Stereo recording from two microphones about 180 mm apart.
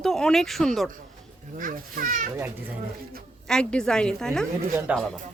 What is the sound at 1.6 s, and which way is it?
Speech, 50° right (ahead or behind).